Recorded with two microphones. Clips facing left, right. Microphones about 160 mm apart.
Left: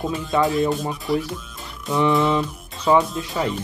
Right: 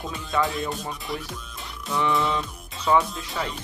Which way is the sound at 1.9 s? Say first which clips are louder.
Left 5 dB; 20° left (ahead or behind).